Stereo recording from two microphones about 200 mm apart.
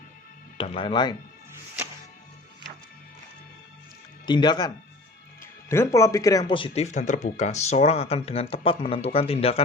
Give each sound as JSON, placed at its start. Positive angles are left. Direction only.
{"t": 0.5, "sound": "speech", "side_deg": 25}
{"t": 4.3, "sound": "speech", "side_deg": 20}